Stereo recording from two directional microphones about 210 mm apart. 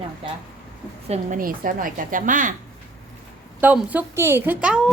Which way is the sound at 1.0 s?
35° right (ahead or behind).